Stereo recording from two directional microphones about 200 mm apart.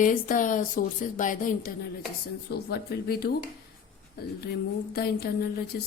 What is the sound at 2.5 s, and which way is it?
Speech, 50° left (ahead or behind).